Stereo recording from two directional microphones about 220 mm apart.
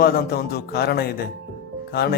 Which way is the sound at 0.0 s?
45° left (ahead or behind).